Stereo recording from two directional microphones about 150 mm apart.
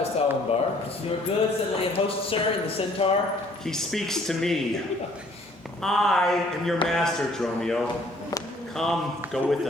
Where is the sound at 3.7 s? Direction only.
5° left (ahead or behind).